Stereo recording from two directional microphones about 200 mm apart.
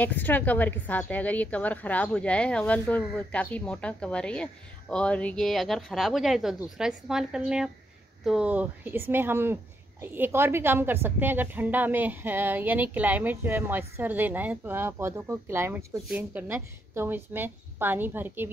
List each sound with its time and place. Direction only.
0.0 s a woman's voice: 10° left (ahead or behind); by 18.5 s 10° right (ahead or behind)